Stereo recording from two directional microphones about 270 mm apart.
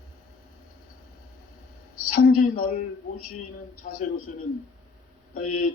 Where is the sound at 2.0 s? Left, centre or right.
Left.